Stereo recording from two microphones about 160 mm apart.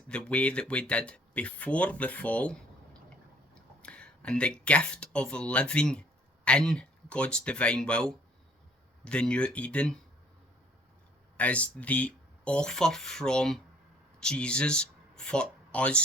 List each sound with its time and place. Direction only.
0.1 s speech: 5° left (ahead or behind)
11.3 s speech: 10° left (ahead or behind)